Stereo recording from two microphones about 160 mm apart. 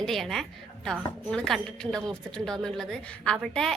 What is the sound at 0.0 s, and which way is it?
A woman's voice, centre (ahead or behind).